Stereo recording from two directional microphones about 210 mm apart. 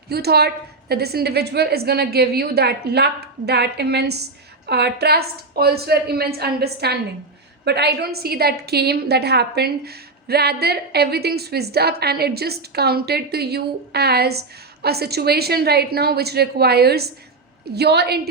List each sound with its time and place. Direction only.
0.1 s a woman's voice: 50° right (ahead or behind)